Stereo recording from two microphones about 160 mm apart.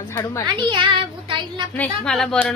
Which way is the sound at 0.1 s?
20° left (ahead or behind).